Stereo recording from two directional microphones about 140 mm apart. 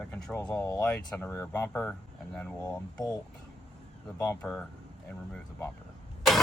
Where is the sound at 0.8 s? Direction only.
10° left (ahead or behind).